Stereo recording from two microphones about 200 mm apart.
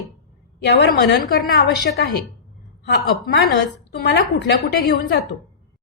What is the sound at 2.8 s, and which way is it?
A woman's voice, 55° left (ahead or behind).